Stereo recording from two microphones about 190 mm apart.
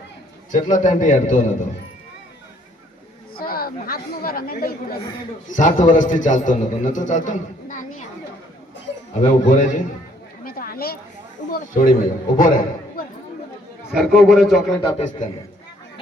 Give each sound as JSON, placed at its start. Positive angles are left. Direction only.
{"t": 0.5, "sound": "a man's voice", "side_deg": 40}
{"t": 3.3, "sound": "a man's voice", "side_deg": 50}
{"t": 9.2, "sound": "a man's voice", "side_deg": 40}
{"t": 10.4, "sound": "a sound", "side_deg": 50}
{"t": 11.5, "sound": "speech", "side_deg": 45}
{"t": 13.9, "sound": "a man's voice", "side_deg": 0}
{"t": 14.8, "sound": "a man's voice", "side_deg": 30}